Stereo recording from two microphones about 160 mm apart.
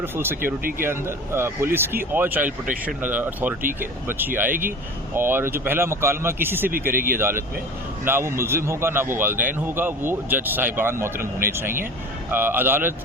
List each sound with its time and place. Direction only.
0.0 s speech: 15° right (ahead or behind)
11.2 s speech: 65° right (ahead or behind)
12.3 s speech: 15° right (ahead or behind)